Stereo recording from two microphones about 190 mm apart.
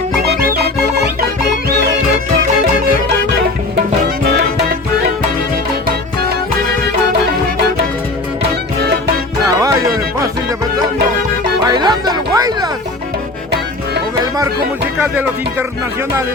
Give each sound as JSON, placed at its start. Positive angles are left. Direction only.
{"t": 9.6, "sound": "music", "side_deg": -15}
{"t": 11.6, "sound": "music", "side_deg": -20}
{"t": 14.9, "sound": "music", "side_deg": -10}